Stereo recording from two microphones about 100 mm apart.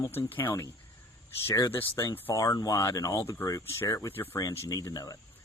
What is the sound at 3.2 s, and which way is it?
Speech, 20° left (ahead or behind).